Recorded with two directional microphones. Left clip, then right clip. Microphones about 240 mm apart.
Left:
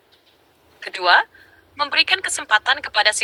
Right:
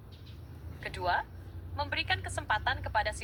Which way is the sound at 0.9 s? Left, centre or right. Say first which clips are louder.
Left 16 dB; left.